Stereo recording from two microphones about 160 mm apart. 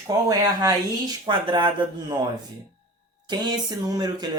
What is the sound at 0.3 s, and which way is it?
Speech, 20° right (ahead or behind).